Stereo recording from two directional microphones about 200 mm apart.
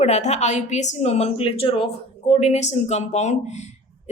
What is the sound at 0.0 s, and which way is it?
A woman's voice, 35° left (ahead or behind).